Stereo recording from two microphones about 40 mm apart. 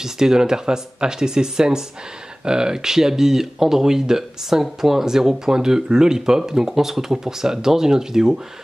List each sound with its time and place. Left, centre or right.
0.0 s speech: centre